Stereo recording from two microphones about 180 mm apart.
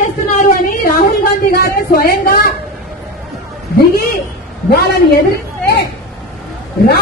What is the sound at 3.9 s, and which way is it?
Speech, 55° left (ahead or behind).